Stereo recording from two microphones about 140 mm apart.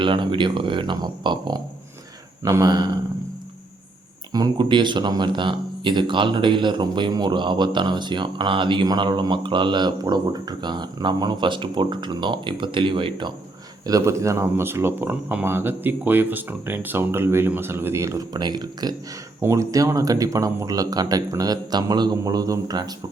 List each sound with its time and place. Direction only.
0.0 s speech: 35° right (ahead or behind)
4.3 s speech: 25° right (ahead or behind)
13.8 s speech: 25° right (ahead or behind)